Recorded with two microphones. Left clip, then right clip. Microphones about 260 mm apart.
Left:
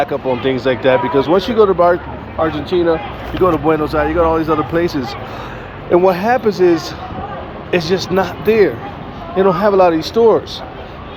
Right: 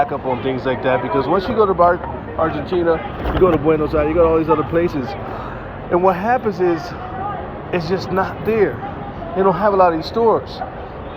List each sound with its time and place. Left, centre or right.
0.0 s speech: left
2.5 s speech: left
2.7 s speech: left